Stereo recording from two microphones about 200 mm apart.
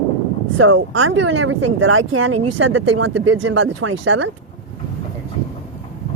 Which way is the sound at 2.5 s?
75° right (ahead or behind).